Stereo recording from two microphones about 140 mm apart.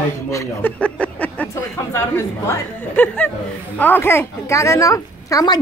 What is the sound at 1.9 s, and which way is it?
A woman's voice, 15° left (ahead or behind).